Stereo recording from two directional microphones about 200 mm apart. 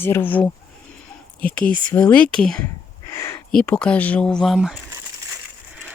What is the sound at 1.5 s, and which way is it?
Speech, 5° left (ahead or behind).